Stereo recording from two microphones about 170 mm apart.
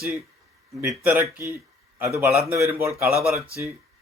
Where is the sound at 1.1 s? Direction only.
15° right (ahead or behind).